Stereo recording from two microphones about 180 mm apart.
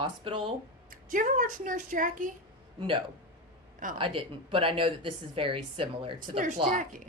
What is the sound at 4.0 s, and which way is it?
Speech, 30° right (ahead or behind).